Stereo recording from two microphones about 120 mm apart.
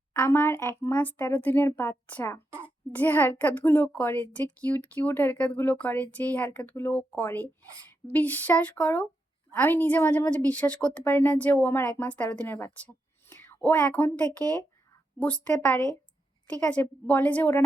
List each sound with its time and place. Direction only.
0.1 s a woman's voice: 20° left (ahead or behind)